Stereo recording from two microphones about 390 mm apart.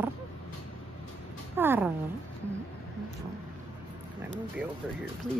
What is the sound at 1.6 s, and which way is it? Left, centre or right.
Speech, centre.